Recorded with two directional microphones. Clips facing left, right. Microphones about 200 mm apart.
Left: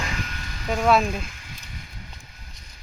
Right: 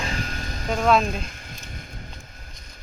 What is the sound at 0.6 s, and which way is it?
Speech, 5° left (ahead or behind).